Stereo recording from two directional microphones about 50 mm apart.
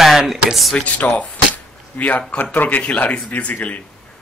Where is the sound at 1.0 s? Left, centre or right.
Left.